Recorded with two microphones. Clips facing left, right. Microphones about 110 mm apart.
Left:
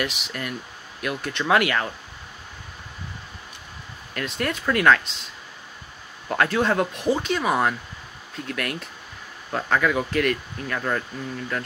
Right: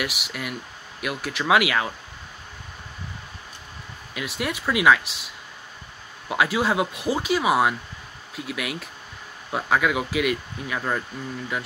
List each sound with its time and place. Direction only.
0.0 s speech: 10° right (ahead or behind)
4.1 s speech: 5° right (ahead or behind)